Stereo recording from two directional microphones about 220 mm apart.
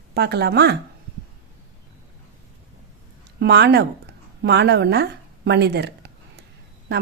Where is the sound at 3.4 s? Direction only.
50° right (ahead or behind).